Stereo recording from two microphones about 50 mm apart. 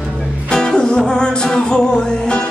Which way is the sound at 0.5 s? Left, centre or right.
Centre.